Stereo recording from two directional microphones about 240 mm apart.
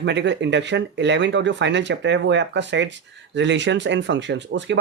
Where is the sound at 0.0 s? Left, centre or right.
Right.